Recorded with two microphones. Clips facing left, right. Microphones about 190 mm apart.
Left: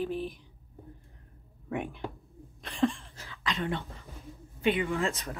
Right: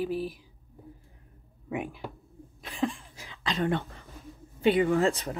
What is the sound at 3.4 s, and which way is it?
Speech, 40° right (ahead or behind).